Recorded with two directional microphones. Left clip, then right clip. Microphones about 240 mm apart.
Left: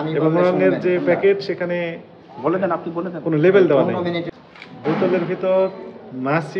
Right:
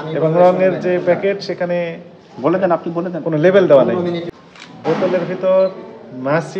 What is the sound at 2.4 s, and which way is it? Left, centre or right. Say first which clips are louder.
Speech: right 5 dB; right.